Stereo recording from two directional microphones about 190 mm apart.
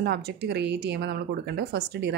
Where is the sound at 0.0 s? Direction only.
60° right (ahead or behind).